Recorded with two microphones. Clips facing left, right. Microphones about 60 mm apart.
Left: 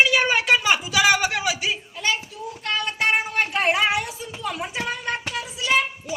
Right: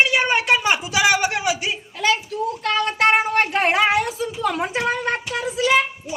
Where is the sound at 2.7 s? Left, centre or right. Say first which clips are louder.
Right 5 dB; right.